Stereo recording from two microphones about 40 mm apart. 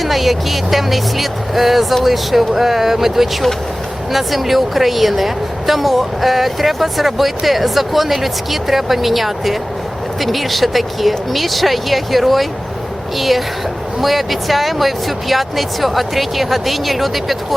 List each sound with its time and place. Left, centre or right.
0.0 s a woman's voice: centre